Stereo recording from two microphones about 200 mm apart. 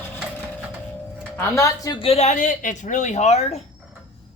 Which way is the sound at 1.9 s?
30° left (ahead or behind).